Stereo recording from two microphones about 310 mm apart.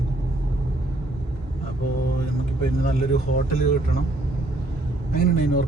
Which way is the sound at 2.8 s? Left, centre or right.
Left.